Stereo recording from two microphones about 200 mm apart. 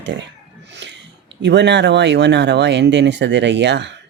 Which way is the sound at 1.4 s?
60° right (ahead or behind).